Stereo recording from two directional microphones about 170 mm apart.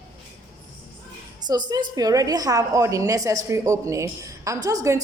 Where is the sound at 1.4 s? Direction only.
25° right (ahead or behind).